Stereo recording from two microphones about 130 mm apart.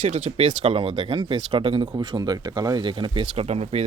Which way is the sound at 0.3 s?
50° right (ahead or behind).